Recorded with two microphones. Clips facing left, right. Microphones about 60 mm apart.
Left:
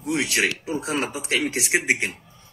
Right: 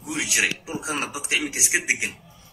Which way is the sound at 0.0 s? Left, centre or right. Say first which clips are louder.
Left 3 dB; left.